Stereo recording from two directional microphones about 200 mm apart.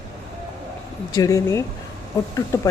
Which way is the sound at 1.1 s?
15° left (ahead or behind).